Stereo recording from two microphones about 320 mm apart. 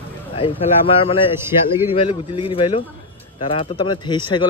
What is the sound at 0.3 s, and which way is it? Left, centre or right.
Speech, centre.